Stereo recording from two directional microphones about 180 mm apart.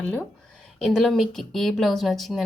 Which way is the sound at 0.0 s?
5° left (ahead or behind).